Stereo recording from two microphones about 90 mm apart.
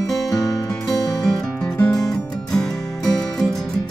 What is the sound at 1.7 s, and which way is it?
Music, 15° left (ahead or behind).